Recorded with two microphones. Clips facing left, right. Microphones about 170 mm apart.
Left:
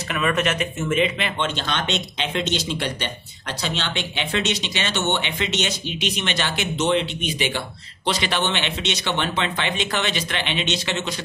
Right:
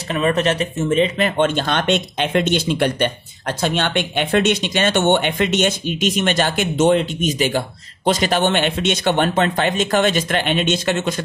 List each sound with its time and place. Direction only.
0.1 s speech: 35° right (ahead or behind); by 11.2 s 50° right (ahead or behind)